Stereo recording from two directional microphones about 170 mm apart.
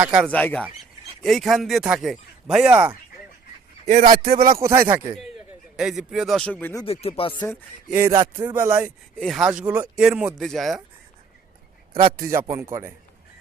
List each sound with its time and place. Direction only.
0.0 s a man's voice: 10° right (ahead or behind)
0.3 s speech: 10° left (ahead or behind)
3.8 s a man's voice: 45° right (ahead or behind)
4.5 s a man's voice: 15° right (ahead or behind)
5.7 s speech: 5° right (ahead or behind)
6.8 s speech: 35° left (ahead or behind)
7.5 s a man's voice: 5° right (ahead or behind)
9.1 s speech: centre (ahead or behind)
12.3 s a man's voice: 15° right (ahead or behind)